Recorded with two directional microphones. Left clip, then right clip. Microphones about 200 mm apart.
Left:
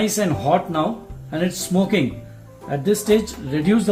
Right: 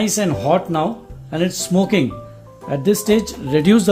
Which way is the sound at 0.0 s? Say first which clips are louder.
Right 1 dB; 45° right (ahead or behind).